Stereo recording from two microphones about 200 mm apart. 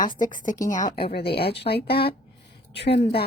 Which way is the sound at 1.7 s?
35° left (ahead or behind).